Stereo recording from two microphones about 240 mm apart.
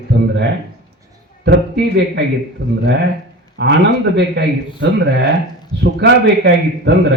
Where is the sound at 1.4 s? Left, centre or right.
Right.